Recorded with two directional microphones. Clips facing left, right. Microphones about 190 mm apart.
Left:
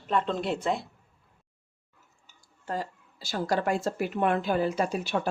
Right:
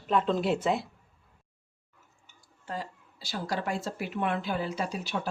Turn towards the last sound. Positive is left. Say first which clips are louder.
# left 5 dB
turn(degrees=50)  # may be behind; listen again after turning